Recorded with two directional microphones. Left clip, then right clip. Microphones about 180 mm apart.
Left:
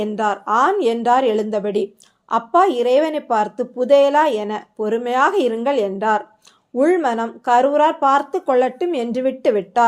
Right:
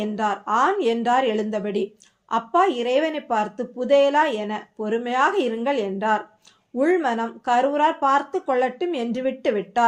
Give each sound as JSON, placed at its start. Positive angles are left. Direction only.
{"t": 0.0, "sound": "speech", "side_deg": 30}